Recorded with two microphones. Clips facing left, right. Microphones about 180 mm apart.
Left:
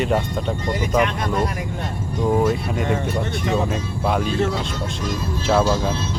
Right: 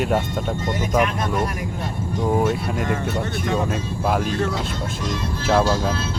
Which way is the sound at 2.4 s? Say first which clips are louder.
Left 1 dB; 5° right (ahead or behind).